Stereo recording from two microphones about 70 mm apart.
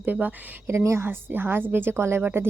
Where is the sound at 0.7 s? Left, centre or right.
Right.